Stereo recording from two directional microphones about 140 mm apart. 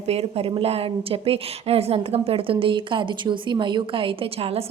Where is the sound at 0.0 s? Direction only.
45° right (ahead or behind).